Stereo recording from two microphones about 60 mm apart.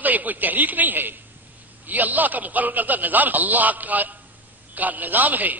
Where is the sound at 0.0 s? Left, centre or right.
Right.